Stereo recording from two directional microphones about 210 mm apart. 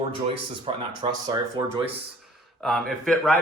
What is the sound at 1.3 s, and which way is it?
Speech, 10° right (ahead or behind).